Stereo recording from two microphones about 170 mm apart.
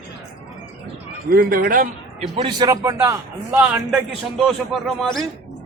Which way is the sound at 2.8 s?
15° right (ahead or behind).